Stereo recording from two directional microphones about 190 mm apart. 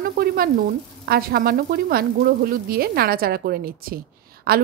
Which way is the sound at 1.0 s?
55° right (ahead or behind).